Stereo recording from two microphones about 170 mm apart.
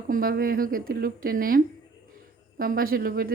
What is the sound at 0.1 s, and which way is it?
A woman's voice, 60° right (ahead or behind).